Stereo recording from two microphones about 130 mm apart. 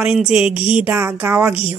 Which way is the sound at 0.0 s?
5° right (ahead or behind).